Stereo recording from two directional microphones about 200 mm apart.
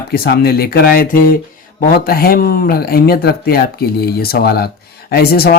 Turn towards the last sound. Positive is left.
turn(degrees=50)  # may be behind; listen again after turning